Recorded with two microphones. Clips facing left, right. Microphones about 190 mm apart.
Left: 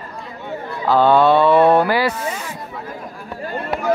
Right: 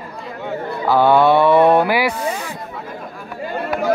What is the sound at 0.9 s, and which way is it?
Speech, 10° right (ahead or behind).